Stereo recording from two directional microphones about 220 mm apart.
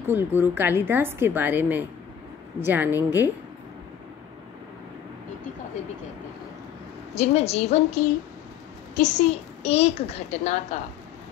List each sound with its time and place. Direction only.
0.0 s a woman's voice: 10° right (ahead or behind)
7.2 s a child's voice: 30° left (ahead or behind)